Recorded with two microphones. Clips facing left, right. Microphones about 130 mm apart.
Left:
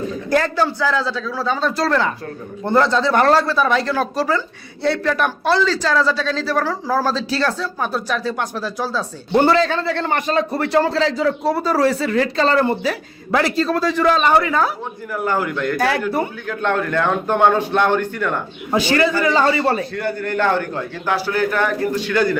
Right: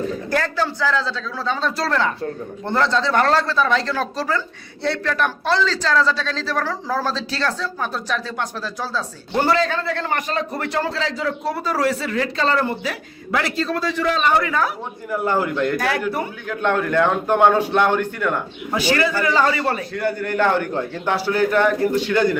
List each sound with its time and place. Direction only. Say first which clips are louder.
0.3 s speech: left 6 dB; 15° left (ahead or behind)
9.4 s a man's voice: left 2 dB; 30° left (ahead or behind)
15.1 s a man's voice: right 1 dB; 25° right (ahead or behind)
15.8 s a man's voice: left 3 dB; 30° left (ahead or behind)
16.5 s a man's voice: right 3 dB; 10° right (ahead or behind)
18.7 s a man's voice: left 3 dB; 25° left (ahead or behind)
20.0 s a man's voice: even; 10° right (ahead or behind)